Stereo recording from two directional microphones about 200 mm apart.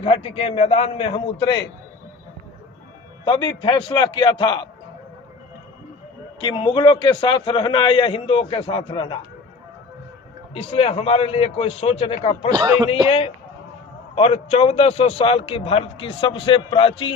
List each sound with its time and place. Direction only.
0.0 s a man's voice: 30° left (ahead or behind)
3.2 s a man's voice: 25° left (ahead or behind)
6.4 s a man's voice: 25° left (ahead or behind)
10.5 s a man's voice: 30° left (ahead or behind)
12.5 s speech: 20° right (ahead or behind)
13.1 s a man's voice: 30° left (ahead or behind)